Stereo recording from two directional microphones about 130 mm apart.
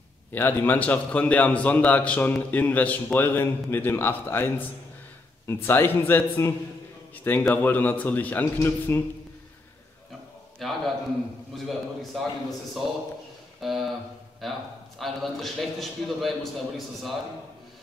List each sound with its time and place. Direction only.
0.3 s a man's voice: 15° left (ahead or behind)
10.6 s a man's voice: centre (ahead or behind)
13.6 s a man's voice: centre (ahead or behind)